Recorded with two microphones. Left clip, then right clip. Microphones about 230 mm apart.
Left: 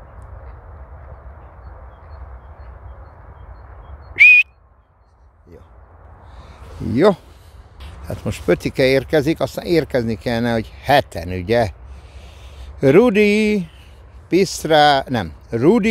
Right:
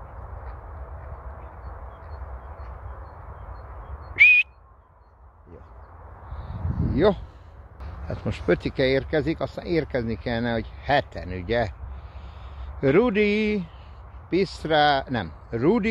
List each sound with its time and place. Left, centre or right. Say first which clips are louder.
4.1 s whistling: left 6 dB; left
6.9 s a man's voice: left 7 dB; left
8.1 s speech: left 5 dB; left
12.8 s speech: left 8 dB; left